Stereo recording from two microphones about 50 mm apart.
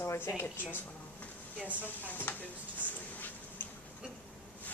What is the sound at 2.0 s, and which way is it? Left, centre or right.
Speech, left.